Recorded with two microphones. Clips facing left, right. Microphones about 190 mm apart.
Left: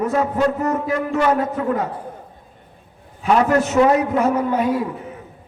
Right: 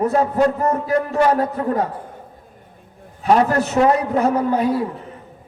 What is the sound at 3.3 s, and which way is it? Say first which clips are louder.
A man's voice: even; 35° right (ahead or behind).